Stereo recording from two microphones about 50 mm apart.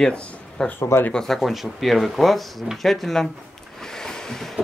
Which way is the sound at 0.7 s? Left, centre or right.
Left.